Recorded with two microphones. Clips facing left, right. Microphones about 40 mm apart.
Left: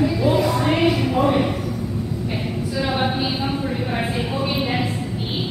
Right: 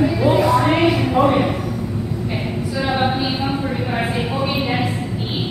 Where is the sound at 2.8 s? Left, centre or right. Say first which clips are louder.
Right 3 dB; centre.